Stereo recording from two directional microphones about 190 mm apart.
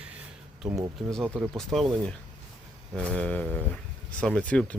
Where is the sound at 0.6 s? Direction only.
15° right (ahead or behind).